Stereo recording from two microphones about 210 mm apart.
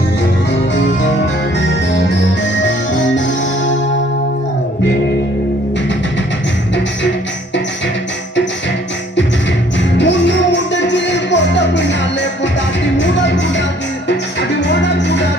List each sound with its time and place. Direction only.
1.5 s music: 60° left (ahead or behind)
3.2 s music: 60° left (ahead or behind)
10.0 s music: 60° left (ahead or behind)